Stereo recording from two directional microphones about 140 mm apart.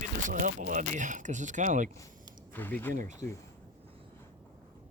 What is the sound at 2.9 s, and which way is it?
Speech, 75° right (ahead or behind).